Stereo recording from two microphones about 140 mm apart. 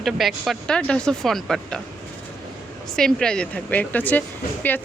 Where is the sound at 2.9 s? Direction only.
5° left (ahead or behind).